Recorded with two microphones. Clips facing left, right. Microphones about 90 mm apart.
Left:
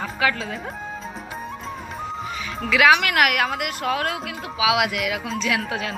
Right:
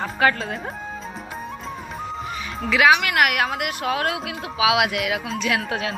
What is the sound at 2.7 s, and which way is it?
Speech, 30° right (ahead or behind).